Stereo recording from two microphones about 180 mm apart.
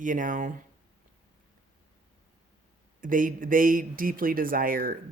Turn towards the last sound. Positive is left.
turn(degrees=-50)  # may be behind; listen again after turning